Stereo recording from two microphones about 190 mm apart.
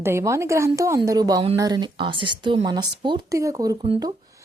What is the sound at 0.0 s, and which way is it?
A woman's voice, 15° right (ahead or behind).